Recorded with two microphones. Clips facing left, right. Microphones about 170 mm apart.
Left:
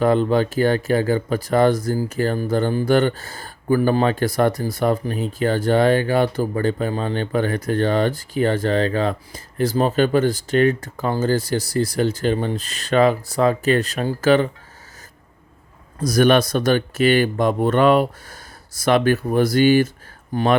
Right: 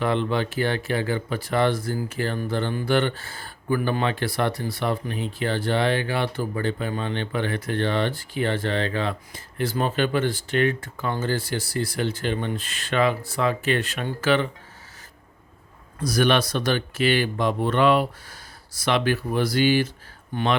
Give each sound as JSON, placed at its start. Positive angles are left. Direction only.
{"t": 0.0, "sound": "speech", "side_deg": 40}
{"t": 16.0, "sound": "speech", "side_deg": 45}